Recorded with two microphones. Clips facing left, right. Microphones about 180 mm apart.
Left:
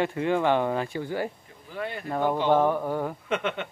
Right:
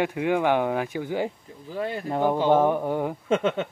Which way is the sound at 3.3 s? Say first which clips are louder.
Right 8 dB; 30° right (ahead or behind).